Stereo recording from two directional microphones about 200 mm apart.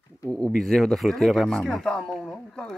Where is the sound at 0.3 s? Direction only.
5° left (ahead or behind).